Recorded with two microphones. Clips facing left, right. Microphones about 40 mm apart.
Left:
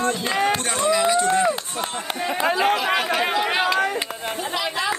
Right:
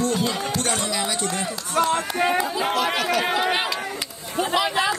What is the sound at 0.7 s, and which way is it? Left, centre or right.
Run, left.